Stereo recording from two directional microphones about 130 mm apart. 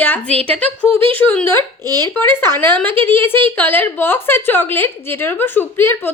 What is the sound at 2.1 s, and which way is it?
A woman's voice, 15° left (ahead or behind).